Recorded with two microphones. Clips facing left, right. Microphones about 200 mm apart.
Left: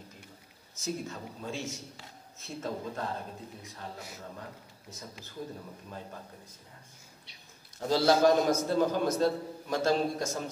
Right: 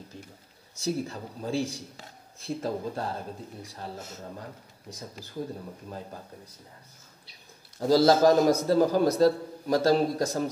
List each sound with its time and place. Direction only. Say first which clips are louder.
0.7 s a man's voice: right 6 dB; 35° right (ahead or behind)
4.9 s a man's voice: right 4 dB; 35° right (ahead or behind)
7.8 s a man's voice: right 4 dB; 40° right (ahead or behind)